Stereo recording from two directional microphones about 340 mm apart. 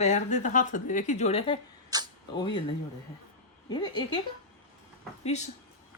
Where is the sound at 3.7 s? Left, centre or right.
Centre.